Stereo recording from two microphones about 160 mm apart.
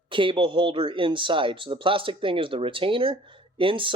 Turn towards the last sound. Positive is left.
turn(degrees=-30)  # may be behind; listen again after turning